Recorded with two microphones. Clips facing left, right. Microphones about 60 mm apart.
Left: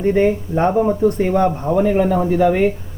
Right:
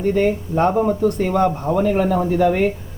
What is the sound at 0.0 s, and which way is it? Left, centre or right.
Speech, left.